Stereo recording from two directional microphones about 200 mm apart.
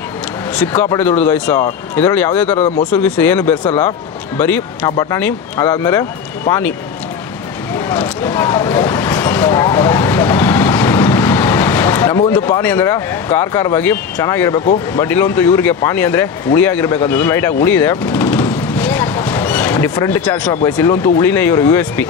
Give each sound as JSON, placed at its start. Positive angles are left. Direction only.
{"t": 0.9, "sound": "speech", "side_deg": 10}
{"t": 2.5, "sound": "speech", "side_deg": 30}
{"t": 2.9, "sound": "speech", "side_deg": 5}
{"t": 7.7, "sound": "vehicle", "side_deg": 10}
{"t": 12.3, "sound": "speech", "side_deg": 15}